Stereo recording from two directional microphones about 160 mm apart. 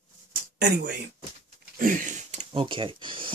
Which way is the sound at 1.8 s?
55° right (ahead or behind).